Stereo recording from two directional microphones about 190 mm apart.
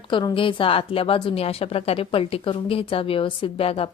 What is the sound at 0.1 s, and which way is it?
A woman's voice, 25° left (ahead or behind).